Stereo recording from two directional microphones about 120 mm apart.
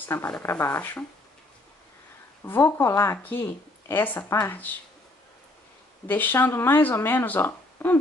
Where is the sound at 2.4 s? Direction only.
15° left (ahead or behind).